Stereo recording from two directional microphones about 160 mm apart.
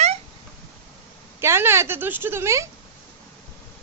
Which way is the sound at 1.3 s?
15° right (ahead or behind).